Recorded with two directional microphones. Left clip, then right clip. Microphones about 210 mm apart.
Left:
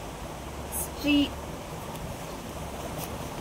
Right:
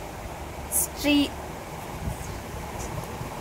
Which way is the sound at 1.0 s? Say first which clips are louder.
Right 2 dB; 40° right (ahead or behind).